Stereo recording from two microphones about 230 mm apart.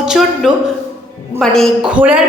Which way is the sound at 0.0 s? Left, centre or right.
Centre.